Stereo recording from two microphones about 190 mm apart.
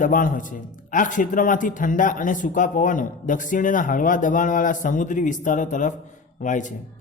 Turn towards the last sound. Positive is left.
turn(degrees=40)  # may be behind; listen again after turning